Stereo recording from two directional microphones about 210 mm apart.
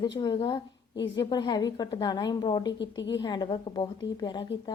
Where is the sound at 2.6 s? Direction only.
60° left (ahead or behind).